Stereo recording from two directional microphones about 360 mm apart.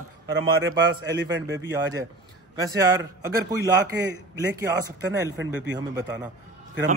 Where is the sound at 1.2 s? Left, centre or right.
Right.